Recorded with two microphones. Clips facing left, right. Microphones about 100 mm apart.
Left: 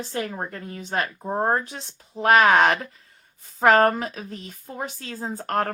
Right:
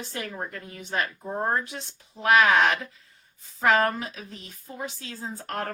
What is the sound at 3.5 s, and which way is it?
Speech, 50° left (ahead or behind).